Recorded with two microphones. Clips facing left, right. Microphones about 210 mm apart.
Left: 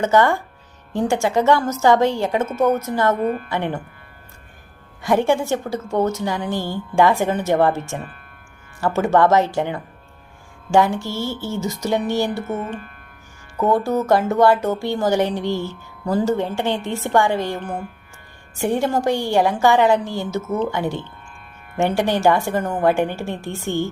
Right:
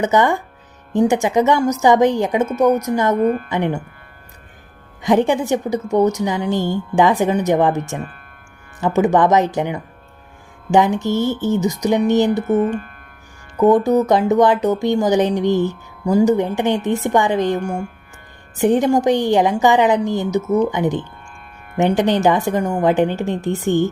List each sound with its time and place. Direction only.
0.0 s a woman's voice: 15° right (ahead or behind)
3.2 s a woman's voice: 45° right (ahead or behind)
3.5 s a woman's voice: 15° right (ahead or behind)
5.0 s a woman's voice: 20° right (ahead or behind)
12.5 s speech: 40° right (ahead or behind)
13.6 s a woman's voice: 20° right (ahead or behind)